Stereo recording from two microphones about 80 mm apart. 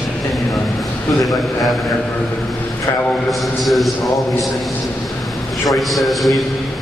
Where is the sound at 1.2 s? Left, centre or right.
Centre.